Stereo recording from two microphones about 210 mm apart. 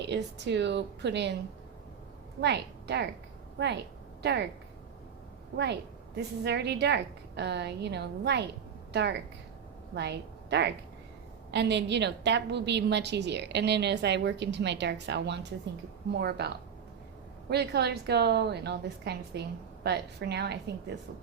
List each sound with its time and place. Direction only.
0.0 s a woman's voice: 55° right (ahead or behind)
2.4 s a woman's voice: 55° right (ahead or behind)
6.1 s a woman's voice: 55° right (ahead or behind)